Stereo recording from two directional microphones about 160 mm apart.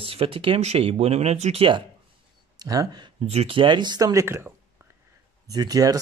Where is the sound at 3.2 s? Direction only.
40° right (ahead or behind).